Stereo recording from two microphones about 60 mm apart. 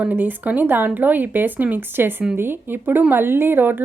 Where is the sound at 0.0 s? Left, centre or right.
Right.